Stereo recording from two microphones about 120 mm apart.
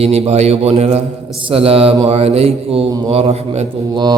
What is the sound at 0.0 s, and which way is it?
A man's voice, 60° right (ahead or behind).